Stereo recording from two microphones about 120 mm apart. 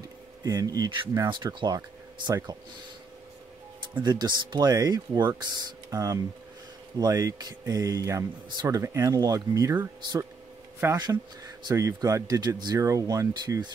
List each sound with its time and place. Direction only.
0.4 s speech: 30° right (ahead or behind)
1.3 s speech: 40° right (ahead or behind)
4.0 s speech: 35° right (ahead or behind)
11.0 s speech: 35° right (ahead or behind)